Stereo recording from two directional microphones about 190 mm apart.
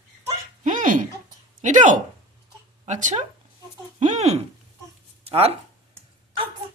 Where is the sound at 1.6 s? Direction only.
40° right (ahead or behind).